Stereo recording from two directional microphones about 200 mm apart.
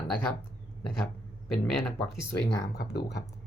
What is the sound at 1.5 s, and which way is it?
Speech, centre (ahead or behind).